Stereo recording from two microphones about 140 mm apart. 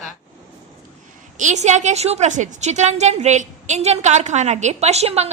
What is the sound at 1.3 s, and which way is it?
A woman's voice, 60° right (ahead or behind).